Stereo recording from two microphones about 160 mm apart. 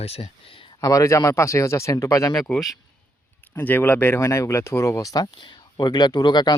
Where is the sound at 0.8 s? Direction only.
20° left (ahead or behind).